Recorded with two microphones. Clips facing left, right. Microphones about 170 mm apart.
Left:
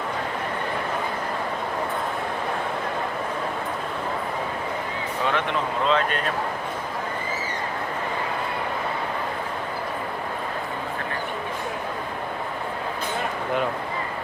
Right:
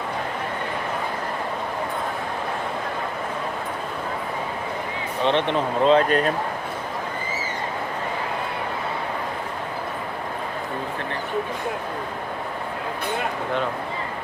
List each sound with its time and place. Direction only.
5.2 s speech: 30° right (ahead or behind)